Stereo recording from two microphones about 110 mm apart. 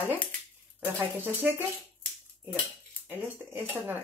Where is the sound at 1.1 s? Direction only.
20° right (ahead or behind).